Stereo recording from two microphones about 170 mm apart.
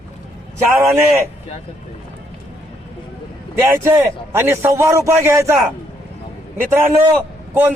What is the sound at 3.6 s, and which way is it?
A man's voice, 15° right (ahead or behind).